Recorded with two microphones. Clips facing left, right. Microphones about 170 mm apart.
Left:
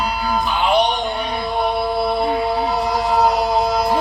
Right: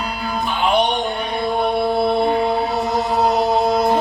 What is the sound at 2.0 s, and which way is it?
Mantra, centre (ahead or behind).